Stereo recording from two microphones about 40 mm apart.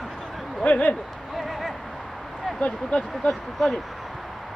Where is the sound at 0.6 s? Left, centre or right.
Left.